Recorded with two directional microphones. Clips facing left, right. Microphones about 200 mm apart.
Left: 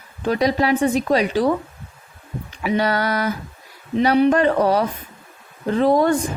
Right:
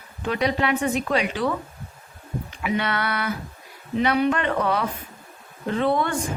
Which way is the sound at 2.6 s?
35° left (ahead or behind).